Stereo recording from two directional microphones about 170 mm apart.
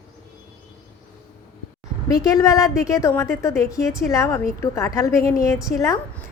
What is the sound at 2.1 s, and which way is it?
A woman's voice, 20° left (ahead or behind).